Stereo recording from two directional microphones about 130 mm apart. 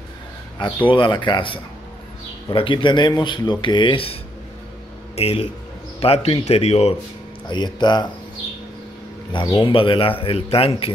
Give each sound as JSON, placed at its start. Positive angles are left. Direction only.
{"t": 0.8, "sound": "a man's voice", "side_deg": 40}
{"t": 7.4, "sound": "speech", "side_deg": 35}
{"t": 9.3, "sound": "a man's voice", "side_deg": 35}